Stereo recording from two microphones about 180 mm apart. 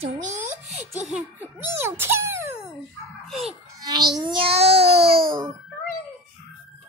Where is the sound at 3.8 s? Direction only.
20° right (ahead or behind).